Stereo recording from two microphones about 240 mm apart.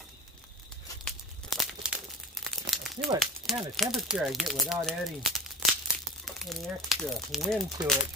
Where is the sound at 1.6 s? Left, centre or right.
Centre.